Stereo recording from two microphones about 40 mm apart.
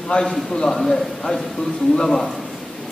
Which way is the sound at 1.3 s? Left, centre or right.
Left.